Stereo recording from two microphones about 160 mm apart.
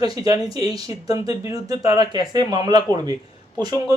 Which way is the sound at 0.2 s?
20° right (ahead or behind).